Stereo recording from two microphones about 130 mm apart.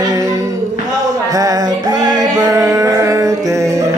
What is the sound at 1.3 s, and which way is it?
Music, 30° right (ahead or behind).